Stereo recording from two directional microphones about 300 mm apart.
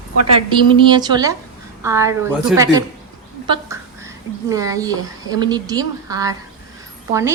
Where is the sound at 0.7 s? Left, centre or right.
Centre.